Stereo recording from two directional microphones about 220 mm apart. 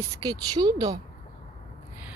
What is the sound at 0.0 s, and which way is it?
Speech, 15° right (ahead or behind).